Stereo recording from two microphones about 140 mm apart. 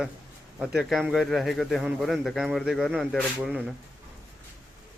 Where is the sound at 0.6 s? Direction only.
Centre (ahead or behind).